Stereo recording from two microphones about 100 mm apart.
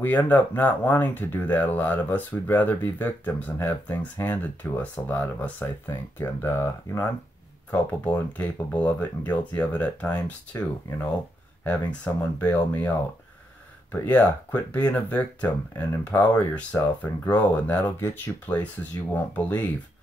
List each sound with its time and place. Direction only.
0.0 s speech: 20° left (ahead or behind)
13.9 s speech: 15° left (ahead or behind)